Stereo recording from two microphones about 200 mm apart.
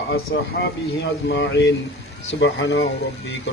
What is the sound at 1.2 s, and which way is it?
A man's voice, 65° left (ahead or behind).